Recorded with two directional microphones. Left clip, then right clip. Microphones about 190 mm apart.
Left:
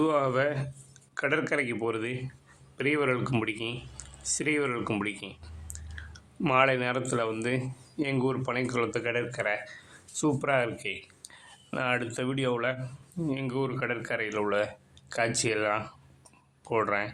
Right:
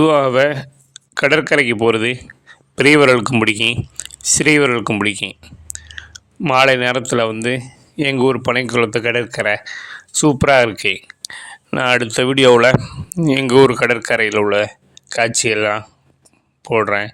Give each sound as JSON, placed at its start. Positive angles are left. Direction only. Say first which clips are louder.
{"t": 0.0, "sound": "speech", "louder": "right 13 dB", "side_deg": -45}
{"t": 2.7, "sound": "speech", "louder": "right 17 dB", "side_deg": -60}